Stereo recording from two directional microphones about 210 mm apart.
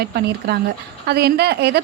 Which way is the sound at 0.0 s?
45° right (ahead or behind).